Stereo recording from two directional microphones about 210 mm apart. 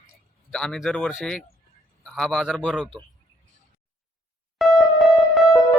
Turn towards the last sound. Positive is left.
turn(degrees=0)  # may be behind; listen again after turning